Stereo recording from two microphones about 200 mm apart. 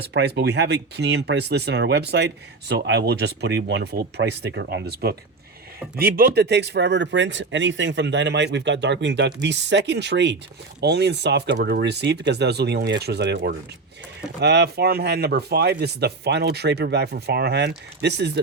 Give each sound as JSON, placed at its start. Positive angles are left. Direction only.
{"t": 0.1, "sound": "speech", "side_deg": -60}